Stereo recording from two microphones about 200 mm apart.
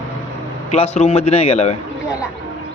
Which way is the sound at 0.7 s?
35° left (ahead or behind).